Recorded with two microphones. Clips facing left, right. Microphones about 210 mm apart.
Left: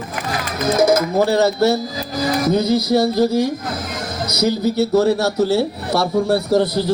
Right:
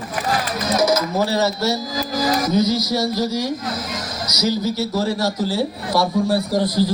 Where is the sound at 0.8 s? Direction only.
55° left (ahead or behind).